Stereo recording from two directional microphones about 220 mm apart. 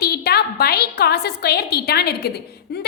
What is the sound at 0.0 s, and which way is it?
A woman's voice, 45° left (ahead or behind).